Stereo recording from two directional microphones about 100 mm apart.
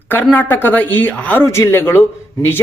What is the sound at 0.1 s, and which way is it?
A man's voice, 20° left (ahead or behind).